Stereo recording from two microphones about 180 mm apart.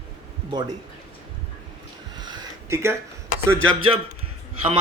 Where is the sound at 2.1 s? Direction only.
25° right (ahead or behind).